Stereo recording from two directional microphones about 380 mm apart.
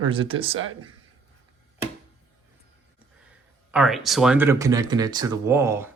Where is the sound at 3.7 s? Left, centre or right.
Centre.